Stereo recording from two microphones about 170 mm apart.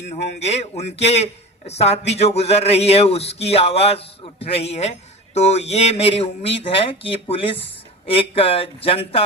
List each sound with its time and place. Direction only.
0.0 s a man's voice: 40° left (ahead or behind)